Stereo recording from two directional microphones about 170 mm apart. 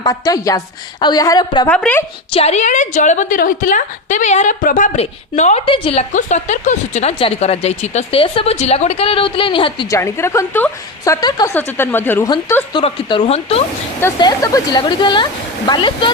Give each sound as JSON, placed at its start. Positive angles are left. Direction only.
{"t": 0.0, "sound": "speech", "side_deg": 20}
{"t": 1.6, "sound": "a woman's voice", "side_deg": 10}
{"t": 2.3, "sound": "a woman's voice", "side_deg": 40}
{"t": 9.9, "sound": "a woman's voice", "side_deg": 15}
{"t": 11.5, "sound": "a woman's voice", "side_deg": 10}
{"t": 12.7, "sound": "a woman's voice", "side_deg": 30}
{"t": 14.2, "sound": "speech", "side_deg": 20}